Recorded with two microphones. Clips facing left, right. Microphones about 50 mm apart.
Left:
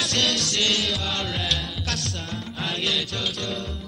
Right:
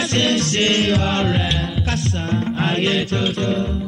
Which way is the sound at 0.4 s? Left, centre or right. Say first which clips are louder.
Right 7 dB; right.